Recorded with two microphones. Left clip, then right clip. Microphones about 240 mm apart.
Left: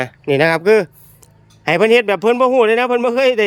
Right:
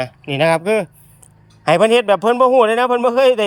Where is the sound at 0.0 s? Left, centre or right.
Centre.